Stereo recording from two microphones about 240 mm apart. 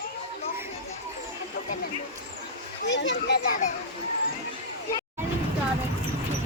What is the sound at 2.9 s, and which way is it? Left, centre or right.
Speech, left.